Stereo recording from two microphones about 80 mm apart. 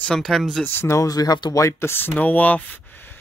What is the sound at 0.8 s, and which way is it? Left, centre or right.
Speech, left.